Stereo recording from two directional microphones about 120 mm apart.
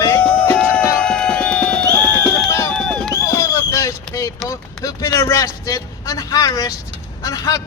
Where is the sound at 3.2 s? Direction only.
25° left (ahead or behind).